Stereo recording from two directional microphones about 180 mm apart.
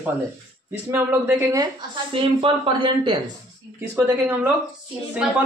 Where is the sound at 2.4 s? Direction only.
30° right (ahead or behind).